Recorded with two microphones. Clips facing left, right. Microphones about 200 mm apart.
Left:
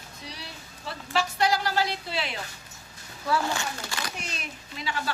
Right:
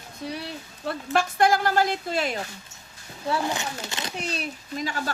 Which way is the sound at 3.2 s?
20° right (ahead or behind).